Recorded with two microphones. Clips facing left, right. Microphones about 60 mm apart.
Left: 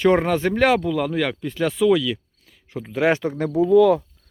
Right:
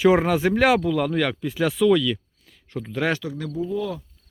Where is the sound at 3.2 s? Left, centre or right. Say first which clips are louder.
Left 7 dB; left.